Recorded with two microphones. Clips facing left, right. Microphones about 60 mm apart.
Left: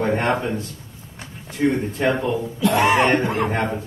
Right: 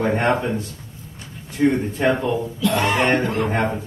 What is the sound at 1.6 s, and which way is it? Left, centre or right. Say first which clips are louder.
Speech: right 1 dB; centre.